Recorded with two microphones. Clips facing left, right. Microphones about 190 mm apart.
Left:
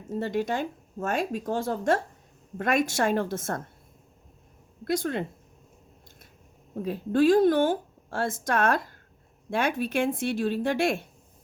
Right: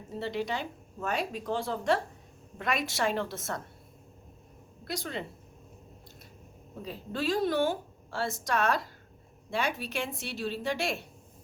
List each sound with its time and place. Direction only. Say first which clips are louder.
0.1 s a woman's voice: left 5 dB; 45° left (ahead or behind)
4.9 s a woman's voice: left 9 dB; 50° left (ahead or behind)
6.8 s a woman's voice: left 11 dB; 55° left (ahead or behind)